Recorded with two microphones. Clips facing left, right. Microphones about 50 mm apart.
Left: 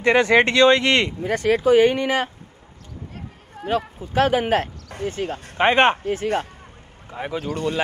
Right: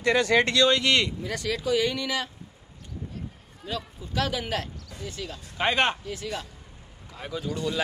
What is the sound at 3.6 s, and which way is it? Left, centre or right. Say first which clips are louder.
A man's voice: left 10 dB; left.